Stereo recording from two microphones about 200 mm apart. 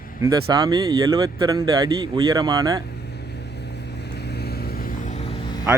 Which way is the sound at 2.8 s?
55° left (ahead or behind).